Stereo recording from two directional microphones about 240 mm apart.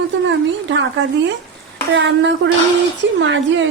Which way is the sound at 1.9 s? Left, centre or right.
Right.